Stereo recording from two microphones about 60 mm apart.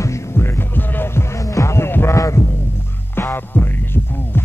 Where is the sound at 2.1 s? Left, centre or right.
Left.